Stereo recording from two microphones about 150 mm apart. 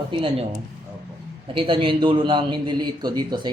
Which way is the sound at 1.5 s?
35° right (ahead or behind).